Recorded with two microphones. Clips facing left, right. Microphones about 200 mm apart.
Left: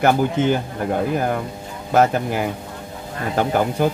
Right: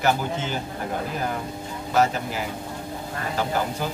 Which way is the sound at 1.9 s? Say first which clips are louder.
Left 5 dB; 55° left (ahead or behind).